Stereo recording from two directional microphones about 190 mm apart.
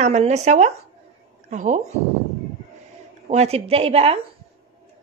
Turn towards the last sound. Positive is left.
turn(degrees=-30)  # may be behind; listen again after turning